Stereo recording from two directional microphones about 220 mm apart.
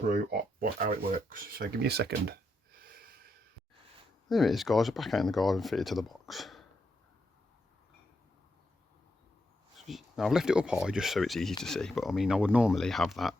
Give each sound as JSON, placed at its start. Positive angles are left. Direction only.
{"t": 0.6, "sound": "speech", "side_deg": -40}
{"t": 1.4, "sound": "a sound", "side_deg": -45}
{"t": 4.3, "sound": "speech", "side_deg": 0}
{"t": 9.7, "sound": "speech", "side_deg": 0}